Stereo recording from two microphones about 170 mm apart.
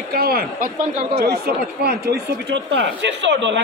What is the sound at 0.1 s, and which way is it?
A man's voice, 65° right (ahead or behind).